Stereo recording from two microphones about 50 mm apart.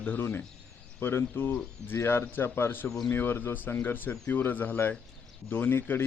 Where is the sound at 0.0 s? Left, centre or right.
Left.